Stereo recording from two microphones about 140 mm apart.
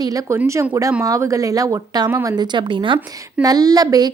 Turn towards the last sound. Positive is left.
turn(degrees=-25)  # may be behind; listen again after turning